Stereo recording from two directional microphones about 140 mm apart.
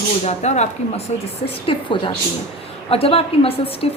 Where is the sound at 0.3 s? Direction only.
55° left (ahead or behind).